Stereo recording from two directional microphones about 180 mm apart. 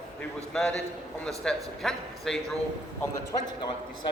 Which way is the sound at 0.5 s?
5° left (ahead or behind).